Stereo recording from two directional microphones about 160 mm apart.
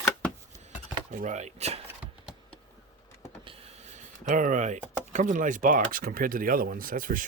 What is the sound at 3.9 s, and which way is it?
Speech, 50° right (ahead or behind).